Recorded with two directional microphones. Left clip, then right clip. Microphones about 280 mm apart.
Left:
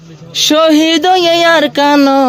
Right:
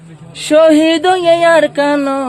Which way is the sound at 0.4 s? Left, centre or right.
Left.